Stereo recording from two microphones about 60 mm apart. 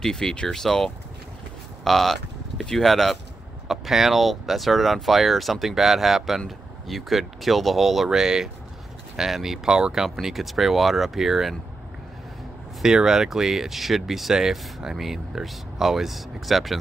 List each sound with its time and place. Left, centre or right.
0.0 s speech: centre
12.8 s speech: centre